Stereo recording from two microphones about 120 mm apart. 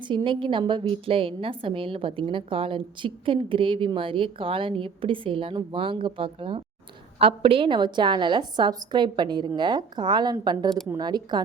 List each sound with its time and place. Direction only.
0.1 s a woman's voice: 45° right (ahead or behind)